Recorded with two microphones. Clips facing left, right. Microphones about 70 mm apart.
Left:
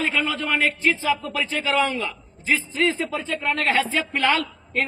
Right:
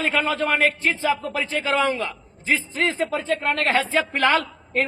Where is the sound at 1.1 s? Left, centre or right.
Right.